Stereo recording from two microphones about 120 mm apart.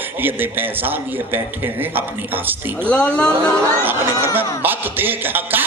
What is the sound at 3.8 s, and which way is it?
A man's voice, 15° right (ahead or behind).